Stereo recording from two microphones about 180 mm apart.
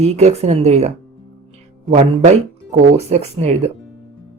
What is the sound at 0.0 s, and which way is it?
A man's voice, 35° right (ahead or behind).